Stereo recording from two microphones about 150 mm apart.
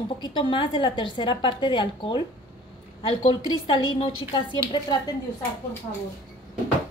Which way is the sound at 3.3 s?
30° left (ahead or behind).